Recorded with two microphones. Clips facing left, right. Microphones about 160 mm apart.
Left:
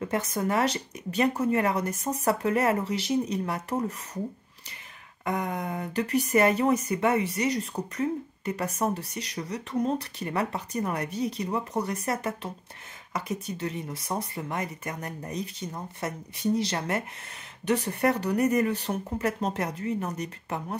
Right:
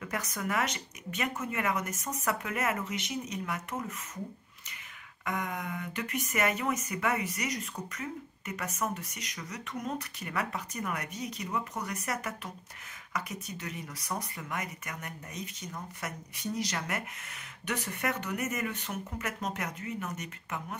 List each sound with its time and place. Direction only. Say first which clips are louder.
0.0 s speech: left 8 dB; 30° left (ahead or behind)
5.2 s speech: left 5 dB; 30° left (ahead or behind)